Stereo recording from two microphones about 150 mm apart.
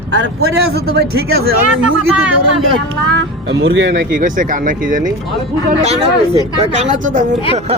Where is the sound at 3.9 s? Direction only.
80° right; by 5.1 s 60° right (ahead or behind).